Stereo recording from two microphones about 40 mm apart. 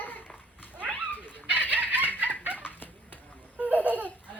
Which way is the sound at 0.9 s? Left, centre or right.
Left.